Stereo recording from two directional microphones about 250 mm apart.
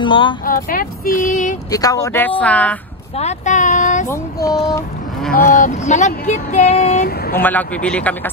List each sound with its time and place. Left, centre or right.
0.0 s speech: centre
0.5 s speech: left
1.7 s speech: centre
3.2 s speech: left
4.1 s speech: centre
5.5 s speech: left
7.3 s speech: centre